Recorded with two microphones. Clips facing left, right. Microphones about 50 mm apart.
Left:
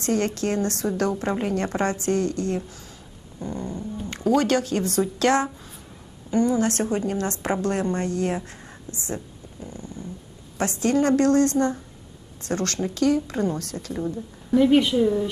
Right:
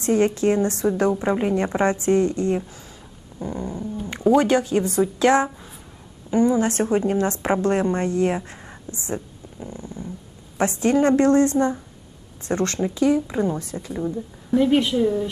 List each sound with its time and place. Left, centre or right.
0.0 s a woman's voice: centre
8.5 s a sound: centre
9.0 s a woman's voice: right; by 15.3 s centre